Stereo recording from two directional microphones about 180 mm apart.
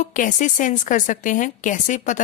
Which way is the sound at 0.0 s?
45° left (ahead or behind).